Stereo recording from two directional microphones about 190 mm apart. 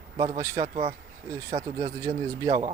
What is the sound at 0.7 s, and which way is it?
Speech, 30° right (ahead or behind).